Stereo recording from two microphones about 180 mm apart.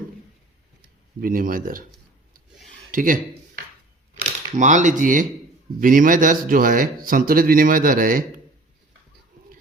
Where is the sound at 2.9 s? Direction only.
50° right (ahead or behind).